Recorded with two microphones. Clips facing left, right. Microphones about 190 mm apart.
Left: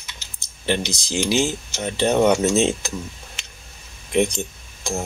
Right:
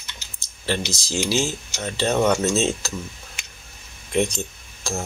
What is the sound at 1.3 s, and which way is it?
Speech, 15° left (ahead or behind).